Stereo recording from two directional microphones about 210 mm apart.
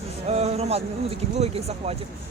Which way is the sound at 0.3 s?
30° right (ahead or behind).